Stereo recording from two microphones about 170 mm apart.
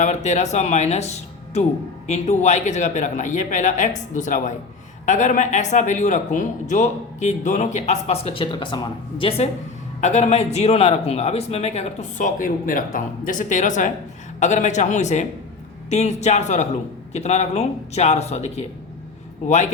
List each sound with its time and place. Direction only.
0.0 s speech: 45° left (ahead or behind)
10.0 s speech: 40° left (ahead or behind)